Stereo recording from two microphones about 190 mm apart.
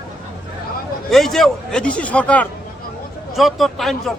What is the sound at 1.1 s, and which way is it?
A man's voice, centre (ahead or behind).